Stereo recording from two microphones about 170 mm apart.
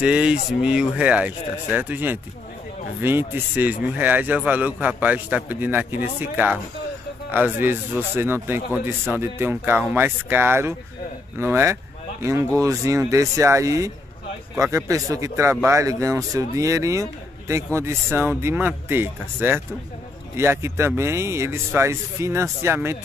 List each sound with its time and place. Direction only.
0.0 s speech: 5° right (ahead or behind)